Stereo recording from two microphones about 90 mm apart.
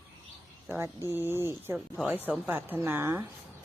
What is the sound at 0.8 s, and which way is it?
Speech, 25° right (ahead or behind).